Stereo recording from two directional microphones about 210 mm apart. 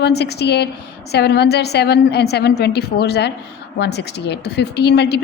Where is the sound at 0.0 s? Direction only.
50° left (ahead or behind).